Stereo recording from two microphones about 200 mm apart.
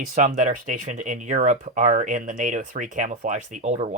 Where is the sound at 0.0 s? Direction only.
40° right (ahead or behind).